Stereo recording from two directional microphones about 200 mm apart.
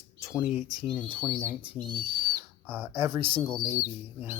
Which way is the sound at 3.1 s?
25° right (ahead or behind).